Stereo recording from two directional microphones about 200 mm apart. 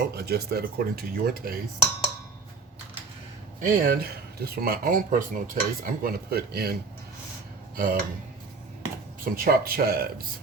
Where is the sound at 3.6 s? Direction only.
40° right (ahead or behind).